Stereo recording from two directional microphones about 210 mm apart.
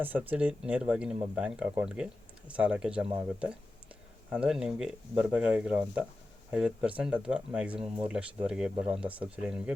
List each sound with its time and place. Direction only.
0.0 s speech: 10° right (ahead or behind)
4.4 s speech: 5° right (ahead or behind)
8.7 s speech: 25° right (ahead or behind)
9.1 s speech: 5° right (ahead or behind)